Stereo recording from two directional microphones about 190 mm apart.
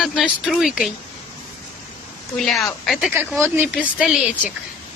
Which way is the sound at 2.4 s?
Centre (ahead or behind).